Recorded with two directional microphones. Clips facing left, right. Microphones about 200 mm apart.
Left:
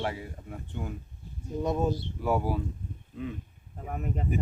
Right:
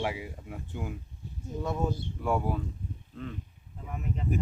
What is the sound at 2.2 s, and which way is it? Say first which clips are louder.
Speech: even; 5° left (ahead or behind).